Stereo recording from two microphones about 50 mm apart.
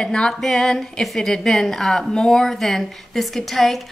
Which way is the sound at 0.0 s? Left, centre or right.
Centre.